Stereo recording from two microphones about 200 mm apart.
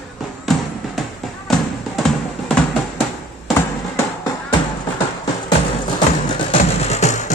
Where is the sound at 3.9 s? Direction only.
20° left (ahead or behind).